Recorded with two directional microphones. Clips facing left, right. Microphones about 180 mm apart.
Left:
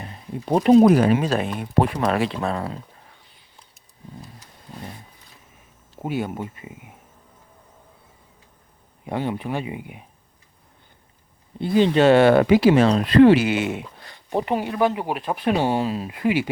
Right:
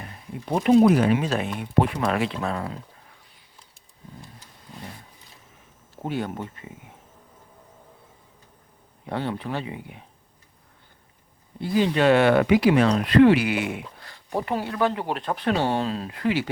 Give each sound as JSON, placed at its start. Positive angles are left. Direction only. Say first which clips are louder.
{"t": 0.0, "sound": "a sound", "louder": "left 4 dB", "side_deg": 30}
{"t": 0.9, "sound": "speech", "louder": "left 3 dB", "side_deg": 40}
{"t": 6.0, "sound": "speech", "louder": "left 2 dB", "side_deg": 10}
{"t": 9.0, "sound": "speech", "louder": "left 3 dB", "side_deg": 15}
{"t": 11.6, "sound": "speech", "louder": "left 4 dB", "side_deg": 25}